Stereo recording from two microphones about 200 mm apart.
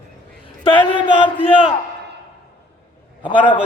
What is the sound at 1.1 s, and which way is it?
Speech, 25° left (ahead or behind).